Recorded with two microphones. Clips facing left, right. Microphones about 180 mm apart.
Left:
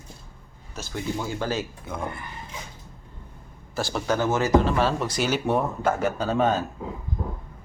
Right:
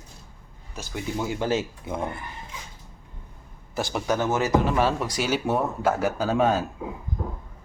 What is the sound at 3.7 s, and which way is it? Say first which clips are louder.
Speech: even; 20° right (ahead or behind).